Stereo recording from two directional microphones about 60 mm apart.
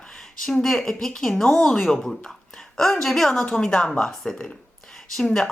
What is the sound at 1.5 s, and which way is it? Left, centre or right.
Speech, centre.